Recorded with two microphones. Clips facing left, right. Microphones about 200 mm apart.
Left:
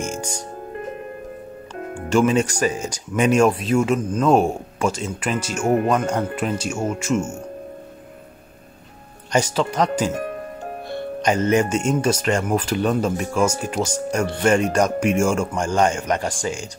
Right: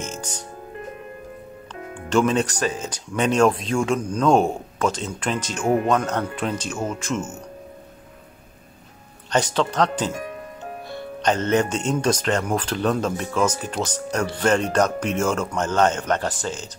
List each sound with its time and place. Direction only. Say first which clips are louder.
0.0 s music: left 5 dB; 10° left (ahead or behind)
2.0 s speech: left 2 dB; 10° left (ahead or behind)
9.3 s speech: left 1 dB; 10° left (ahead or behind)
10.1 s music: left 5 dB; 55° left (ahead or behind)
11.1 s speech: left 2 dB; 10° left (ahead or behind)